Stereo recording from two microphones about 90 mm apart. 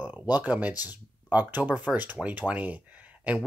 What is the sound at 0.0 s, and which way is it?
Speech, 20° right (ahead or behind).